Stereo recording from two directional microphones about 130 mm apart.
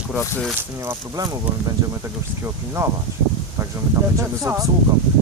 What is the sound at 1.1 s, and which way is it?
Speech, 30° right (ahead or behind).